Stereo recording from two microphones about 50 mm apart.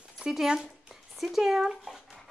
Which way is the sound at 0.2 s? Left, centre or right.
Centre.